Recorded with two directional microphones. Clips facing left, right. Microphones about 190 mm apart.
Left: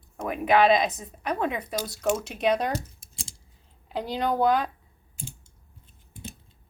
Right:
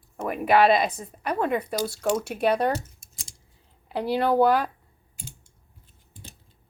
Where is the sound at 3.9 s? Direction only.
10° right (ahead or behind).